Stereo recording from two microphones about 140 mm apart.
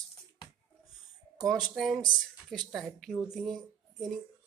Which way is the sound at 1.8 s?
Centre (ahead or behind).